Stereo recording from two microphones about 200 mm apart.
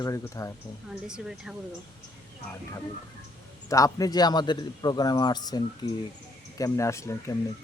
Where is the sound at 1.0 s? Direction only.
5° right (ahead or behind).